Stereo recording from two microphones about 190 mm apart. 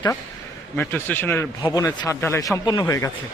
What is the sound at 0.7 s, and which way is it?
Speech, 10° left (ahead or behind).